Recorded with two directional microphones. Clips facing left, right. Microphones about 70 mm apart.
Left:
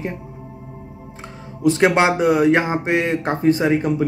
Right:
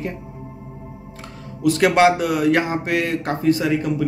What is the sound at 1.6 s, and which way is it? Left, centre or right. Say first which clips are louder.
Speech: even; left.